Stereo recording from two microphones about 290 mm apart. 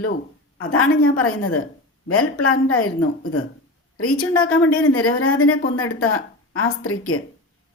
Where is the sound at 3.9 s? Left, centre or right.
Left.